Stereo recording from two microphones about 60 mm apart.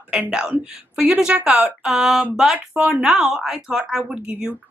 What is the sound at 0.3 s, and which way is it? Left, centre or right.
Speech, centre.